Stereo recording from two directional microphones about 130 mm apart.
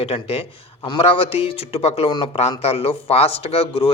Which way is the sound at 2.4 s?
50° left (ahead or behind).